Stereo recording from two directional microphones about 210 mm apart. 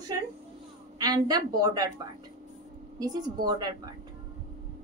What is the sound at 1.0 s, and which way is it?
Speech, 20° right (ahead or behind).